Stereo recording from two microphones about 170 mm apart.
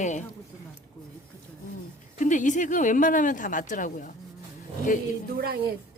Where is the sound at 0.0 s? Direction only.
45° left (ahead or behind).